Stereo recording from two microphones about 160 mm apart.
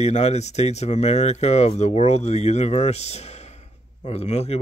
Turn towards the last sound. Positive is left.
turn(degrees=40)  # may be behind; listen again after turning